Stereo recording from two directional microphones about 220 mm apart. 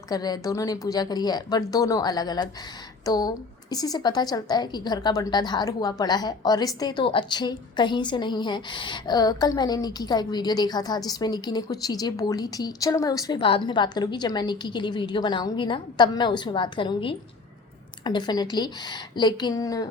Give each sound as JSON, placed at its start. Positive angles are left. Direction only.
{"t": 0.1, "sound": "a woman's voice", "side_deg": 15}